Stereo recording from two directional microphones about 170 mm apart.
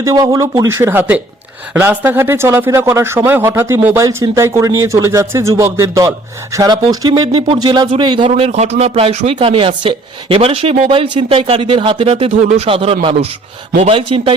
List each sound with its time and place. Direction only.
0.0 s a man's voice: 20° right (ahead or behind)
8.3 s speech: 40° right (ahead or behind)